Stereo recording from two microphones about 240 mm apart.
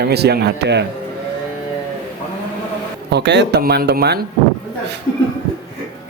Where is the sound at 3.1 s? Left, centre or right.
Right.